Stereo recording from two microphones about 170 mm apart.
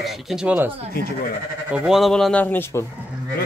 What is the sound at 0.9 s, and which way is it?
Speech, 65° left (ahead or behind).